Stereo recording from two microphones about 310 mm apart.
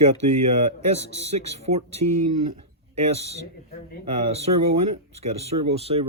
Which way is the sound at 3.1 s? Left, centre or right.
Centre.